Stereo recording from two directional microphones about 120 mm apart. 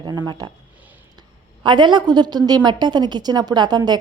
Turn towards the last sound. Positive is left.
turn(degrees=-35)  # may be behind; listen again after turning